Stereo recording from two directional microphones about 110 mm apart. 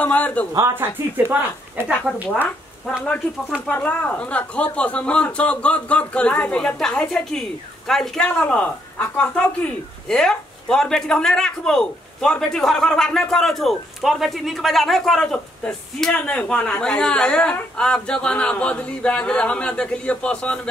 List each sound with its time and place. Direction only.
0.0 s speech: 15° left (ahead or behind)
0.6 s speech: 25° right (ahead or behind)
3.0 s speech: 10° left (ahead or behind)